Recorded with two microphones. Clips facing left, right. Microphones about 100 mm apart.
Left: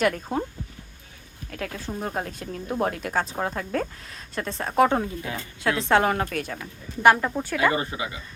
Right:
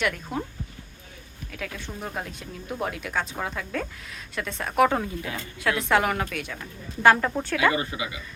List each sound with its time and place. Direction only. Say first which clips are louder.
0.0 s speech: left 4 dB; 30° left (ahead or behind)
1.5 s speech: left 4 dB; 40° left (ahead or behind)
7.0 s speech: left 1 dB; 15° left (ahead or behind)
7.7 s speech: even; 30° left (ahead or behind)